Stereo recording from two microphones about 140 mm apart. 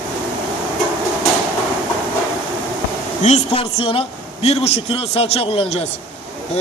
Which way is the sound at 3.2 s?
50° left (ahead or behind).